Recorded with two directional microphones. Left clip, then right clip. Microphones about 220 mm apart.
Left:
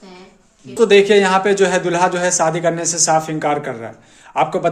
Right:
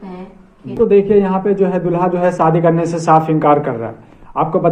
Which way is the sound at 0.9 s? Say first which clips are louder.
Left 1 dB; 35° left (ahead or behind).